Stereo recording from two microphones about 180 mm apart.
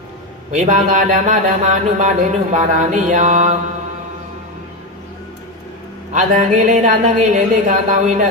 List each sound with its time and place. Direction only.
0.5 s speech: 45° right (ahead or behind)
6.1 s speech: 45° right (ahead or behind)